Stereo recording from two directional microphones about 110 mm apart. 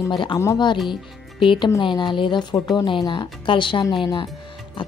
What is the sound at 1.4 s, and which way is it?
Speech, 45° left (ahead or behind).